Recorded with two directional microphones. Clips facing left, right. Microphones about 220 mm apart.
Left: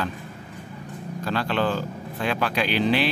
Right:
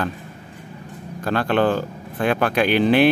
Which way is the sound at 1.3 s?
55° right (ahead or behind).